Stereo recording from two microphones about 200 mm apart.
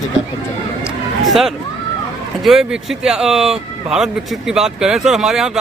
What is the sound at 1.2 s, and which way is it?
Speech, centre (ahead or behind).